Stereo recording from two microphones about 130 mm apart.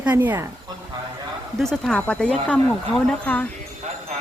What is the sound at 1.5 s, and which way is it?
Speech, 5° left (ahead or behind).